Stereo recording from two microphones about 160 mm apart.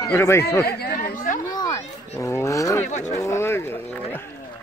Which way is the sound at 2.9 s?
45° left (ahead or behind).